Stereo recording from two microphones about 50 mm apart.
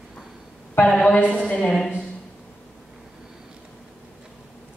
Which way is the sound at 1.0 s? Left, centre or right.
Left.